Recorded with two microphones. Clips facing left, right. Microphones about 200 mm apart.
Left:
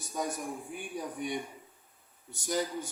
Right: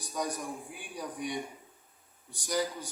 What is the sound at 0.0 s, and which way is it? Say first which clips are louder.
A man's voice: even; 25° left (ahead or behind).